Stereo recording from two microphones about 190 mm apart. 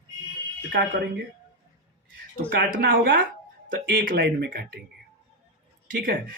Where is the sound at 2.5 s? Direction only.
50° right (ahead or behind).